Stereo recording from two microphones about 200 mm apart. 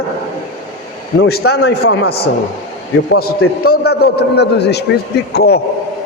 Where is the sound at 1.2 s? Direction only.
50° left (ahead or behind).